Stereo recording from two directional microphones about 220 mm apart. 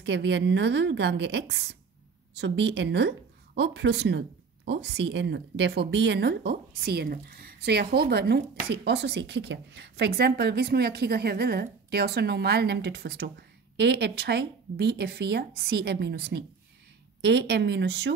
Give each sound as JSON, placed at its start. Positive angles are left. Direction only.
{"t": 0.0, "sound": "speech", "side_deg": -50}